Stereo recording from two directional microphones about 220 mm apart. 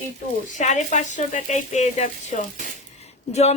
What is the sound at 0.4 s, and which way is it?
A woman's voice, 35° left (ahead or behind).